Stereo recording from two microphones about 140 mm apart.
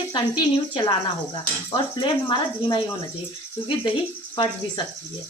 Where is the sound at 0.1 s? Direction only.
35° left (ahead or behind).